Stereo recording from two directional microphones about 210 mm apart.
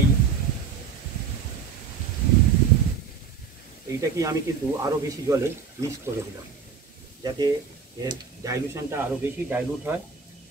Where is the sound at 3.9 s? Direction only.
15° right (ahead or behind).